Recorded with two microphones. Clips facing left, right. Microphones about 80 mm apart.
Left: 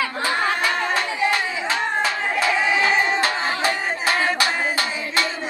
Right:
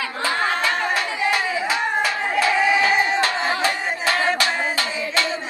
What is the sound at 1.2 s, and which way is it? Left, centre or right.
Clapping, right.